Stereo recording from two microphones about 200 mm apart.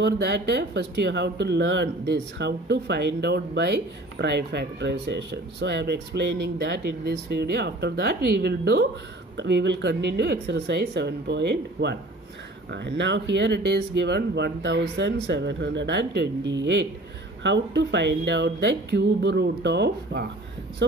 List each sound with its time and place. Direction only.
0.0 s speech: 60° right (ahead or behind)